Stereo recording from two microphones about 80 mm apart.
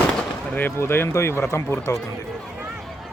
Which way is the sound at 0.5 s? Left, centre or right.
Left.